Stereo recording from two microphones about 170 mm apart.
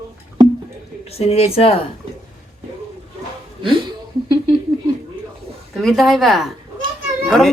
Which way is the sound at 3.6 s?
30° right (ahead or behind).